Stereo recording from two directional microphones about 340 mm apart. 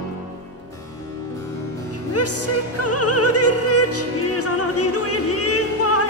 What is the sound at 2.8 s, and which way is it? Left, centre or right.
Opera, left.